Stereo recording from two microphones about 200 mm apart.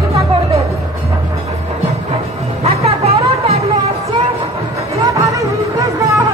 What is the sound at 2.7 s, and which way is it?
Music, 30° right (ahead or behind).